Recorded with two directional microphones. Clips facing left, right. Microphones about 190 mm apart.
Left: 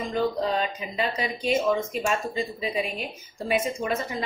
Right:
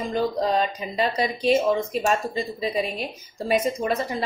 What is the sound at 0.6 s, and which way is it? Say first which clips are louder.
A woman's voice: right 4 dB; 35° right (ahead or behind).